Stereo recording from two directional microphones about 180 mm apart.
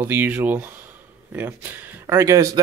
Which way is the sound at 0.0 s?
10° right (ahead or behind).